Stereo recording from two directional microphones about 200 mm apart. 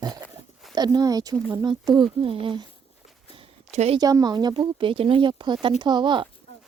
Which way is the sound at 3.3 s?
30° right (ahead or behind).